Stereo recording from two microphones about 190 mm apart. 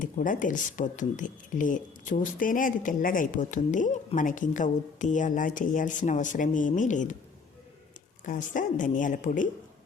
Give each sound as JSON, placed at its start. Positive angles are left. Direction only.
{"t": 0.0, "sound": "speech", "side_deg": 45}
{"t": 8.2, "sound": "speech", "side_deg": 45}